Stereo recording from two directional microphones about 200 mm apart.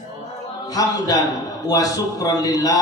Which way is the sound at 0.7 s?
20° left (ahead or behind).